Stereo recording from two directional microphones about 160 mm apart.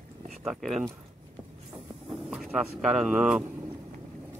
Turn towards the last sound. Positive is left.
turn(degrees=-20)  # may be behind; listen again after turning